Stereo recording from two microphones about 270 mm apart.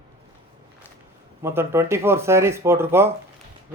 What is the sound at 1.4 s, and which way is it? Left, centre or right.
A man's voice, centre.